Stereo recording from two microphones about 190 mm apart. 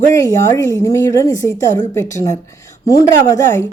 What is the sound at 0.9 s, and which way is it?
Speech, 15° left (ahead or behind).